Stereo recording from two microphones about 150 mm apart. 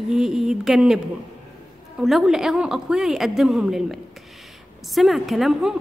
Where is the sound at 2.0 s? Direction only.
Centre (ahead or behind).